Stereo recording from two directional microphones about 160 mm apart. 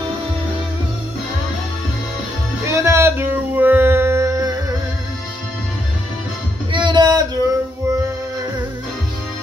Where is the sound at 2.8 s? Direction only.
15° right (ahead or behind).